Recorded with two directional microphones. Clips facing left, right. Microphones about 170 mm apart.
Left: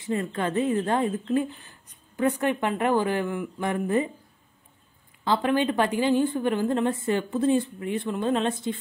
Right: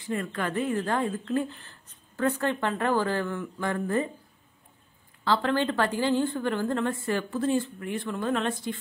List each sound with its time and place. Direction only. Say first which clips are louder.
0.0 s a woman's voice: left 3 dB; 25° left (ahead or behind)
5.2 s a woman's voice: left 2 dB; 20° left (ahead or behind)